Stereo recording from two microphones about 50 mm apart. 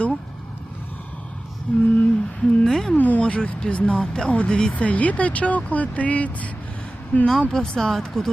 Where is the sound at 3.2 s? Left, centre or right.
Left.